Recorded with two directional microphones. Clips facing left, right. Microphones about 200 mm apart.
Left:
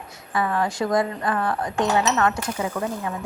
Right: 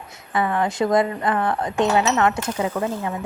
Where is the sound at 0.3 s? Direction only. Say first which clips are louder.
Right 2 dB; 20° right (ahead or behind).